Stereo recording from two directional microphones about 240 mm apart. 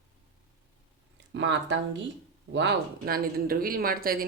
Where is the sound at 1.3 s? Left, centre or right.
Right.